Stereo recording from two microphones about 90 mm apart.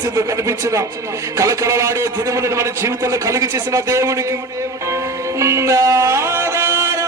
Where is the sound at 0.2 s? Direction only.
35° right (ahead or behind).